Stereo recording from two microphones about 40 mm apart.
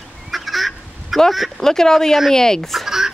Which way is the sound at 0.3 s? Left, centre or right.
Centre.